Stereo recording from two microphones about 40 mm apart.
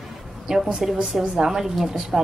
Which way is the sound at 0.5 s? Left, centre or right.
Centre.